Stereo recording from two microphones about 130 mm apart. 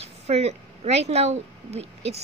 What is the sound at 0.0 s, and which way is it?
A woman's voice, 55° right (ahead or behind).